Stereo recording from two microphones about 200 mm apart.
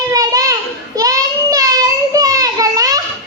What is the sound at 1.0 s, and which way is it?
Child singing, 15° right (ahead or behind).